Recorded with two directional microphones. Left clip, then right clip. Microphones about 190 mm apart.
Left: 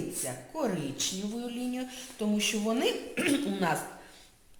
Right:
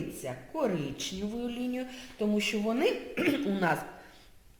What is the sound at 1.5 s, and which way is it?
A woman's voice, 35° right (ahead or behind).